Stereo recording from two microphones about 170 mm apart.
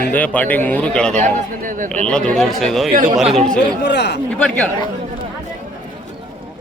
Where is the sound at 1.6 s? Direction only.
50° right (ahead or behind).